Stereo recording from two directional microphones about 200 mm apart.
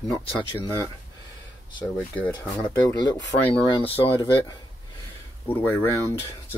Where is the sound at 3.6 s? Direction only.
25° left (ahead or behind).